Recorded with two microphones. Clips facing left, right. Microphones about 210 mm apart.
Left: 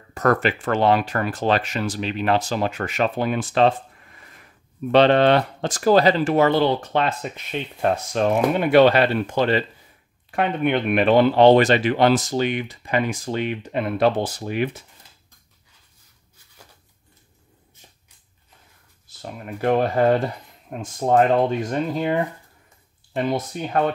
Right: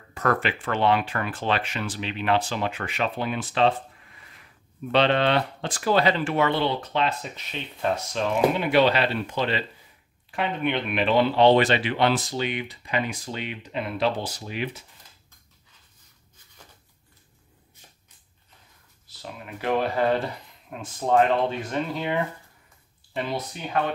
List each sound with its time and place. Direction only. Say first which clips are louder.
0.1 s speech: left 5 dB; 45° left (ahead or behind)
19.0 s speech: left 5 dB; 45° left (ahead or behind)